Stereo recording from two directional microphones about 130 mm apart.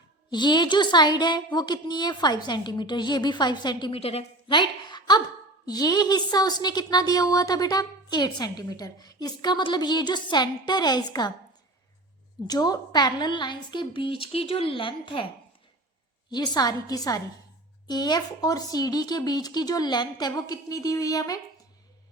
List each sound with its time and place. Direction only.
0.3 s a woman's voice: 35° left (ahead or behind)
12.5 s a woman's voice: 30° left (ahead or behind)
16.3 s a woman's voice: 35° left (ahead or behind)